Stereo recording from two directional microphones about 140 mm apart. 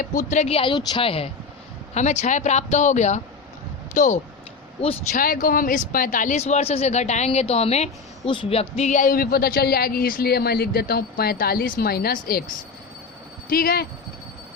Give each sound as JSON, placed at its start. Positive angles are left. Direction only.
{"t": 0.0, "sound": "speech", "side_deg": 70}
{"t": 1.9, "sound": "speech", "side_deg": 55}
{"t": 5.1, "sound": "speech", "side_deg": 90}
{"t": 13.5, "sound": "speech", "side_deg": 90}